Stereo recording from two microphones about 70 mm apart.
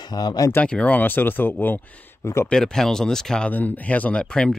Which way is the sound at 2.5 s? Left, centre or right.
Centre.